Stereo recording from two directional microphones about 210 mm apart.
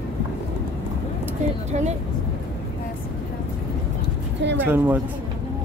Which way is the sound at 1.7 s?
30° right (ahead or behind).